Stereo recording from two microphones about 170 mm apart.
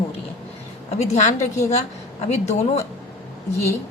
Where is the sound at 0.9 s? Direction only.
40° left (ahead or behind).